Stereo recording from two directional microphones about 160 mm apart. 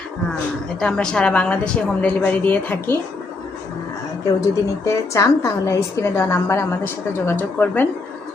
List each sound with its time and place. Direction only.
0.8 s a woman's voice: 5° left (ahead or behind)
4.9 s a woman's voice: 20° left (ahead or behind)